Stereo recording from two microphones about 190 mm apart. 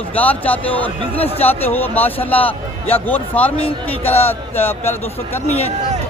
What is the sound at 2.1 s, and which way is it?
Speech, 30° left (ahead or behind).